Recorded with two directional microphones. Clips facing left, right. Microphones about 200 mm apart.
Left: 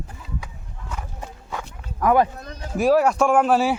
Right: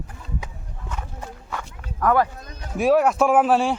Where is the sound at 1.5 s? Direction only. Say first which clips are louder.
Left 2 dB; 15° left (ahead or behind).